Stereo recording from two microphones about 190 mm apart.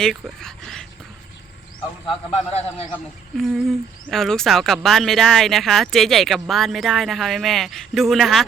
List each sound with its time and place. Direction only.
0.0 s speech: 5° left (ahead or behind)
2.0 s a man's voice: 35° left (ahead or behind)
3.3 s speech: centre (ahead or behind)